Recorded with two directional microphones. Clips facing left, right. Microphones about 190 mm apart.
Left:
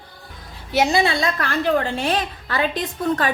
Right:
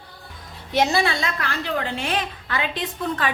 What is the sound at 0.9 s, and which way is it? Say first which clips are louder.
Speech: left 3 dB; 20° left (ahead or behind).